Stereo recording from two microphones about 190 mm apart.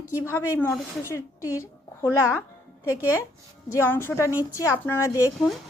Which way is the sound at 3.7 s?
10° left (ahead or behind).